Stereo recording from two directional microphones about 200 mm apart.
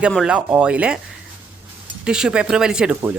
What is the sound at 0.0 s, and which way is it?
Speech, 5° right (ahead or behind).